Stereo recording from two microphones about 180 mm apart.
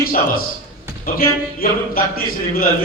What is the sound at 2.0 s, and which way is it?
Speech, 55° left (ahead or behind).